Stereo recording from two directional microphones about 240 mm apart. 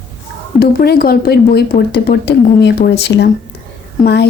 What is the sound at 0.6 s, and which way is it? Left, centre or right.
A woman's voice, left.